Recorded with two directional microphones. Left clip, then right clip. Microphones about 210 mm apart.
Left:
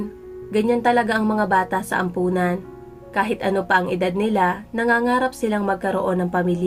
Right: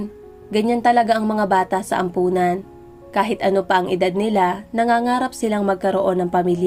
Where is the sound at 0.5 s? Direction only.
30° right (ahead or behind).